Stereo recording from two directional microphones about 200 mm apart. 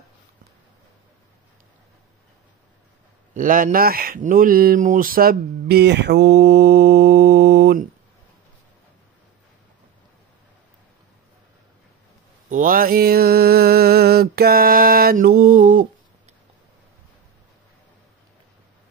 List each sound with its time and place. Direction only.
3.3 s speech: 40° right (ahead or behind)
12.4 s mantra: 40° right (ahead or behind)